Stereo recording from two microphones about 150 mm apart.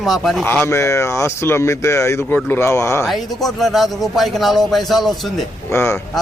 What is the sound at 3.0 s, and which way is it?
A man's voice, centre (ahead or behind).